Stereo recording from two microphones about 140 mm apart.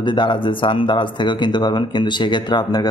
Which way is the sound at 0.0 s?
35° left (ahead or behind).